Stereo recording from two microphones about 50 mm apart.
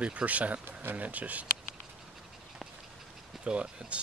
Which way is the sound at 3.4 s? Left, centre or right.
Right.